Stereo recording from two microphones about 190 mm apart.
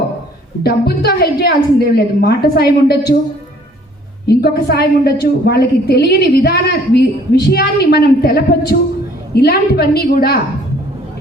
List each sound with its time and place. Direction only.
0.6 s a woman's voice: 55° left (ahead or behind)
4.4 s a woman's voice: 55° left (ahead or behind)